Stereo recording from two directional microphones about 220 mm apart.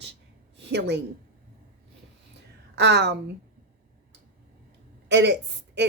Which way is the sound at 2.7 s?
50° right (ahead or behind).